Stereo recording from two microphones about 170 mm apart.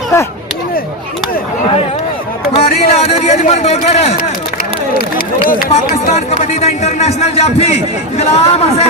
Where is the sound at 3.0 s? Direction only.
40° left (ahead or behind).